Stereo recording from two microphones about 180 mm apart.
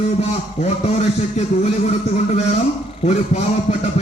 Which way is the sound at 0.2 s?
40° left (ahead or behind).